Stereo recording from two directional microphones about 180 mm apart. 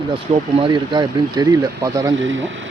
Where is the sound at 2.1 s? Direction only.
90° right.